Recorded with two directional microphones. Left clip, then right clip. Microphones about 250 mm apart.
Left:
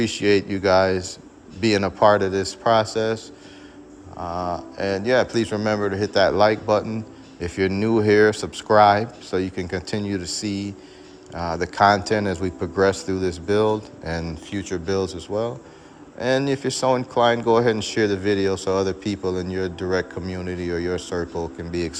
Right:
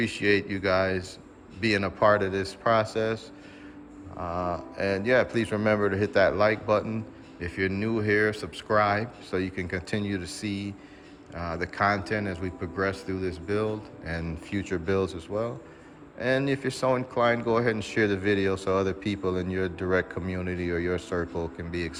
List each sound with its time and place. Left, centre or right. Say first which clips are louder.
0.0 s speech: left 5 dB; centre
4.2 s speech: left 4 dB; centre